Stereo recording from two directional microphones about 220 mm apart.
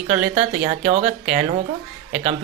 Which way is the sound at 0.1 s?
30° right (ahead or behind).